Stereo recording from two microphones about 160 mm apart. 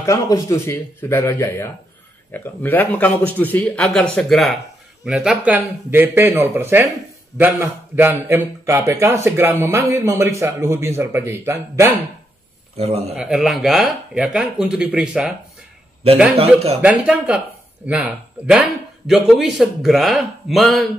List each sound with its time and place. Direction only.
0.0 s a man's voice: 20° left (ahead or behind); by 11.9 s 15° right (ahead or behind)
12.7 s a man's voice: 40° right (ahead or behind)
13.1 s speech: 5° right (ahead or behind)
16.3 s speech: 40° right (ahead or behind)
16.8 s a man's voice: 5° right (ahead or behind)